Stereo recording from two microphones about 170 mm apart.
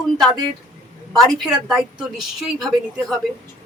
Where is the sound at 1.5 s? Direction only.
Centre (ahead or behind).